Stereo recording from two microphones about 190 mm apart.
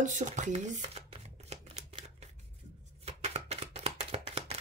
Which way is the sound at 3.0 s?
35° right (ahead or behind).